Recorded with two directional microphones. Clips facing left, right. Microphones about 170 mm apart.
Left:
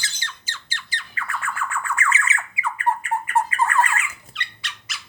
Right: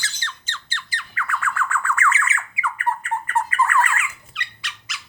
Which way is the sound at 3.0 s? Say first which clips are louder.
Left 2 dB; 10° left (ahead or behind).